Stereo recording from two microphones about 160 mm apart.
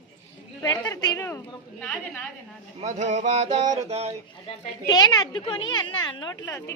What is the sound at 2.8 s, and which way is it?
Music, 45° right (ahead or behind).